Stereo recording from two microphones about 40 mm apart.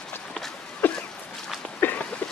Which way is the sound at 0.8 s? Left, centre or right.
Left.